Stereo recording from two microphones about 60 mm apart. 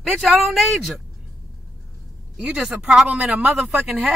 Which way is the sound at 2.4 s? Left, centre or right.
Centre.